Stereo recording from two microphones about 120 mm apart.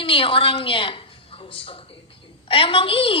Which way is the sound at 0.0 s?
45° left (ahead or behind).